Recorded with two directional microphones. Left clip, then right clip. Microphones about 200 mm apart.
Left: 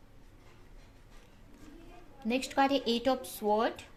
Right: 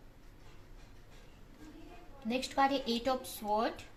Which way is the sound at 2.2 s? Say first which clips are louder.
Left 2 dB; 55° left (ahead or behind).